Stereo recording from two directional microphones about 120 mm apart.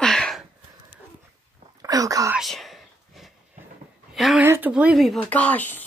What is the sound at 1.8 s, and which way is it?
Speech, 30° right (ahead or behind).